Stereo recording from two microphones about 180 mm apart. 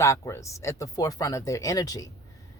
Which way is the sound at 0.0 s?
15° left (ahead or behind).